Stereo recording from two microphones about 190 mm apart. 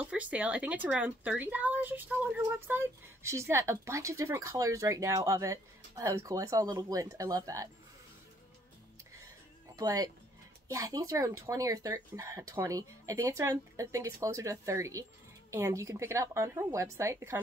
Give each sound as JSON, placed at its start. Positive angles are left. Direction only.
{"t": 0.0, "sound": "speech", "side_deg": -5}
{"t": 9.8, "sound": "speech", "side_deg": -20}